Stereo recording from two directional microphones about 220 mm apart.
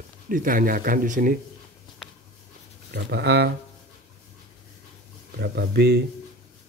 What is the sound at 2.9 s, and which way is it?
Speech, 50° right (ahead or behind).